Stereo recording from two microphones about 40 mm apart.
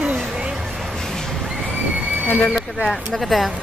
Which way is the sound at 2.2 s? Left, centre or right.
Left.